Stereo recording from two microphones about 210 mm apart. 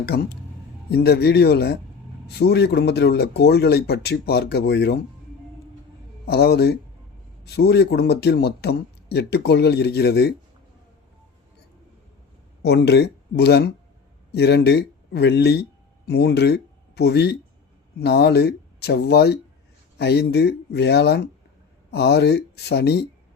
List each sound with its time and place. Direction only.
0.0 s a man's voice: 50° left (ahead or behind)
6.2 s a man's voice: 50° left (ahead or behind)
12.6 s a man's voice: 50° left (ahead or behind)